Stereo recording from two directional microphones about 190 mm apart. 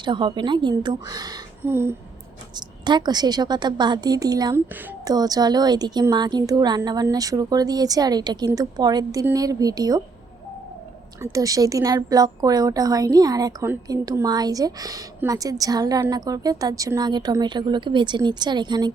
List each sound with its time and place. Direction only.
0.0 s a woman's voice: 25° right (ahead or behind)
11.2 s a woman's voice: 20° right (ahead or behind)